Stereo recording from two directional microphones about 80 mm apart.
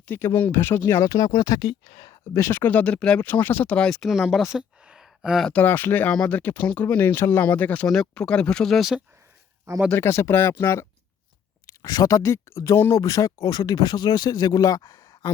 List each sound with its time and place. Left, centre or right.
0.1 s speech: left
1.0 s speech: left
1.3 s speech: left
2.3 s speech: left; by 3.2 s centre
3.2 s speech: left
4.0 s speech: centre
5.5 s speech: left; by 9.0 s centre
9.9 s speech: left
11.6 s speech: left
14.8 s a sound: left